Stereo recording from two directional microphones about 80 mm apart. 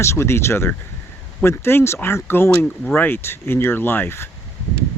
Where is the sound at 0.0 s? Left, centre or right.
Left.